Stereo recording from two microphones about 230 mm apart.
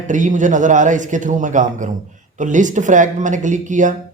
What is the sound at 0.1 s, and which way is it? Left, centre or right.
Speech, right.